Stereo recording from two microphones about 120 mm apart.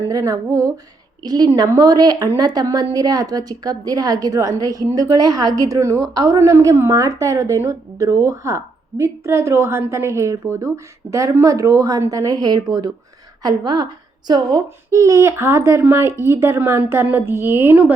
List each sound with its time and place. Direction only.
0.0 s a woman's voice: 30° right (ahead or behind)